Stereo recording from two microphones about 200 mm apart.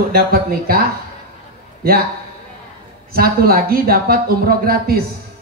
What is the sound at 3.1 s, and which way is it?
A man's voice, 50° right (ahead or behind).